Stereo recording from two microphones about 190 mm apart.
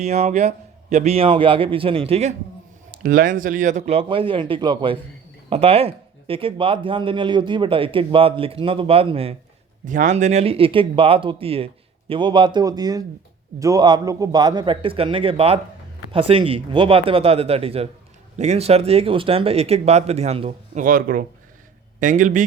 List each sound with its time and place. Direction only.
0.0 s speech: 35° right (ahead or behind)
3.0 s speech: 45° right (ahead or behind); by 9.3 s 30° right (ahead or behind)
9.8 s speech: 40° right (ahead or behind)
20.8 s a man's voice: 45° right (ahead or behind)